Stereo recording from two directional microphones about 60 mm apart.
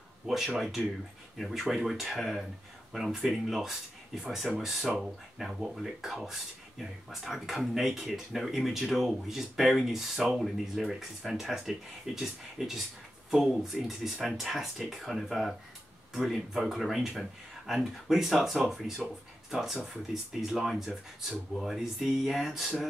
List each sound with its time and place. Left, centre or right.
0.6 s speech: centre